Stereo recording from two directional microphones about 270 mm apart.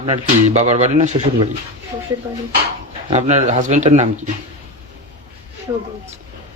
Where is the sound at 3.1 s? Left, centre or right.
Right.